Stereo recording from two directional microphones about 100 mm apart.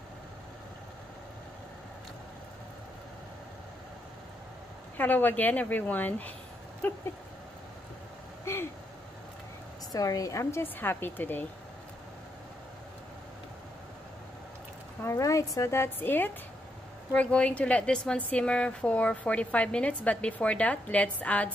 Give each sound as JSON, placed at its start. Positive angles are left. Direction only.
{"t": 4.9, "sound": "a woman's voice", "side_deg": 15}
{"t": 8.5, "sound": "a sound", "side_deg": 30}
{"t": 9.9, "sound": "speech", "side_deg": 35}
{"t": 15.0, "sound": "a woman's voice", "side_deg": 30}